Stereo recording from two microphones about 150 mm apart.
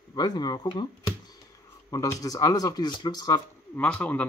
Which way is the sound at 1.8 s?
20° left (ahead or behind).